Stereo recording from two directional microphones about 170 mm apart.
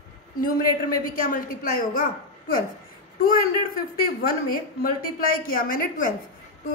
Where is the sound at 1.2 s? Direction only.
55° left (ahead or behind).